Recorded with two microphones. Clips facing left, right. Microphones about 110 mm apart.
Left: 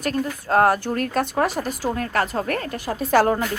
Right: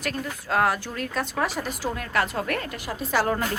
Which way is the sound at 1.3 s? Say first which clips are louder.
Left 5 dB; 45° left (ahead or behind).